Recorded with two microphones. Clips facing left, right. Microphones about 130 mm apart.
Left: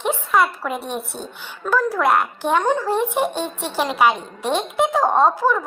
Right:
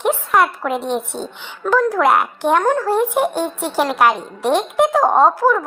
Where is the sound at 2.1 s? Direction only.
10° right (ahead or behind).